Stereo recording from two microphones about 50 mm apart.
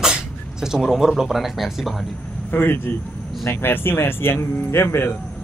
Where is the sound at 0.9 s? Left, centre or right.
Centre.